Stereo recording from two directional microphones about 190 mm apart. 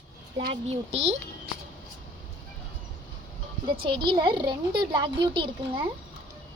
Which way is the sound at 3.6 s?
25° right (ahead or behind).